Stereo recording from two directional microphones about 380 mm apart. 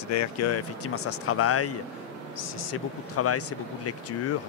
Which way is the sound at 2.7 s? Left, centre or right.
Left.